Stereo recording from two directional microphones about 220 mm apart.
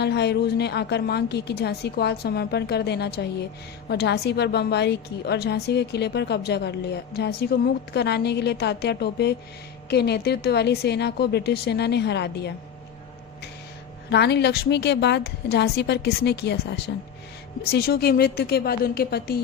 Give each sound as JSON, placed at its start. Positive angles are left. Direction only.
{"t": 0.0, "sound": "a woman's voice", "side_deg": 50}
{"t": 14.1, "sound": "a woman's voice", "side_deg": 50}